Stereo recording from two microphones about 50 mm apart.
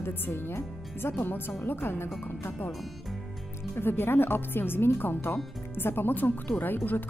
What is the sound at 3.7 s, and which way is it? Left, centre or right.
Speech, left.